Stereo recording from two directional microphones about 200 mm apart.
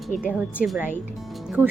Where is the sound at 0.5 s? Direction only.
5° right (ahead or behind).